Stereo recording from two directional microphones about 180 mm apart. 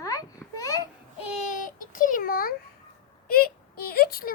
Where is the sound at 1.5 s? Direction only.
50° left (ahead or behind).